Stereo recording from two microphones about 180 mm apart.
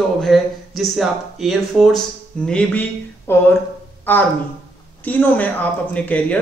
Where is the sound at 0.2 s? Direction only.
Centre (ahead or behind).